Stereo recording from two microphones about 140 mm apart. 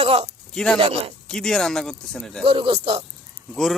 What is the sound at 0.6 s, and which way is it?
Speech, 5° left (ahead or behind).